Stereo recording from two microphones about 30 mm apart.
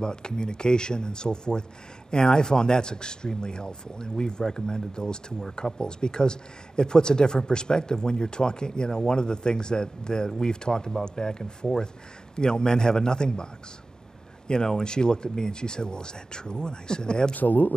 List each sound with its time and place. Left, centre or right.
0.0 s speech: left
14.5 s speech: left
17.3 s a man's voice: left